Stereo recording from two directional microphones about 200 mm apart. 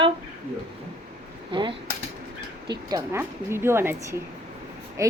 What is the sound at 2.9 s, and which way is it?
A woman's voice, 15° right (ahead or behind).